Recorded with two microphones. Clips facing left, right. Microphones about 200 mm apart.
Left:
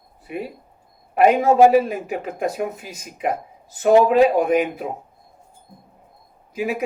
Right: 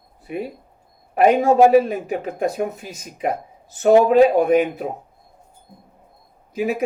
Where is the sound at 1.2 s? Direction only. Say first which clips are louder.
Even; 40° right (ahead or behind).